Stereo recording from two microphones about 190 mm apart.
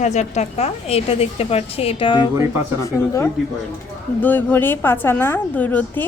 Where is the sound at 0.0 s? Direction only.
35° left (ahead or behind).